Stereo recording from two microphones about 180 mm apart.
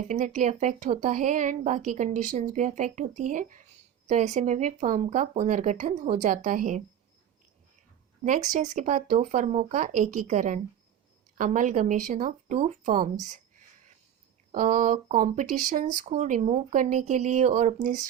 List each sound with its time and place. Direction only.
0.0 s speech: 45° right (ahead or behind)
8.2 s speech: 40° right (ahead or behind)
14.5 s speech: 45° right (ahead or behind)